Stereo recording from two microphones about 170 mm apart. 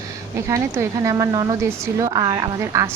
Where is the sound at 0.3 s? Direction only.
15° right (ahead or behind).